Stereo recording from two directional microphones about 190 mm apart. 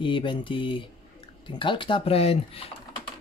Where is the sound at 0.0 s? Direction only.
25° left (ahead or behind).